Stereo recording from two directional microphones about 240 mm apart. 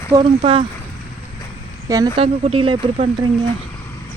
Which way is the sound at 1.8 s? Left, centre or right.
Centre.